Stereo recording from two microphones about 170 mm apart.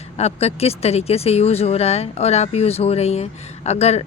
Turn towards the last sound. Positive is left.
turn(degrees=40)  # may be behind; listen again after turning